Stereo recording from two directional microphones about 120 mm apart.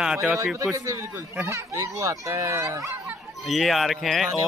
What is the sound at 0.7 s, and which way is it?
Speech, 25° right (ahead or behind).